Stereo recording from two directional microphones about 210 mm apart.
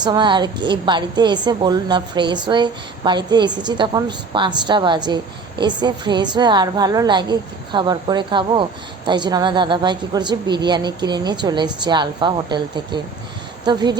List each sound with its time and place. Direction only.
0.0 s a woman's voice: 20° right (ahead or behind)